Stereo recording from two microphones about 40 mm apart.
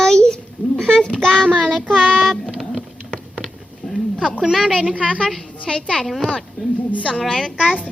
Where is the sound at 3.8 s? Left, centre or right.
Centre.